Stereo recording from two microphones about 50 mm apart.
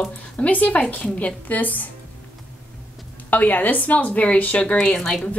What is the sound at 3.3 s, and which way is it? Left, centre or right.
A woman's voice, left.